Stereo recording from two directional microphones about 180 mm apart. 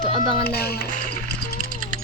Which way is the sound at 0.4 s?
60° left (ahead or behind).